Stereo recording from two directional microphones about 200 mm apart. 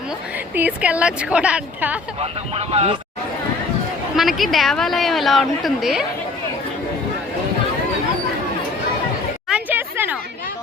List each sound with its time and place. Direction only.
0.5 s a woman's voice: 5° right (ahead or behind)
2.2 s speech: 30° right (ahead or behind)
4.2 s a woman's voice: centre (ahead or behind)
9.5 s a sound: 10° right (ahead or behind)